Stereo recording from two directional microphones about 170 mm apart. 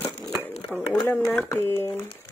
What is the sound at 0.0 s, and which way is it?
Crumpling, centre (ahead or behind).